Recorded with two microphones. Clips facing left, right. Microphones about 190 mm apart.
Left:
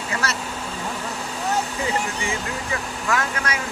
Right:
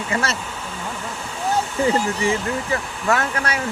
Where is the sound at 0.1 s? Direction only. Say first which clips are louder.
Right 4 dB; 25° right (ahead or behind).